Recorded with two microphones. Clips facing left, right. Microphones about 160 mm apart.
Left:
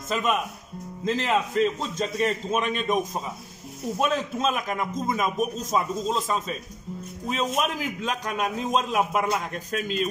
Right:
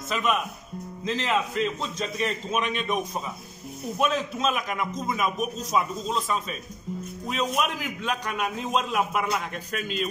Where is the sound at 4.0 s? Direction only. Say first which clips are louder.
Even; 40° left (ahead or behind).